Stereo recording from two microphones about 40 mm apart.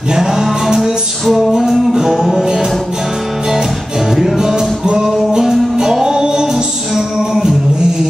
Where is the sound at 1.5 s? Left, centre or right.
Centre.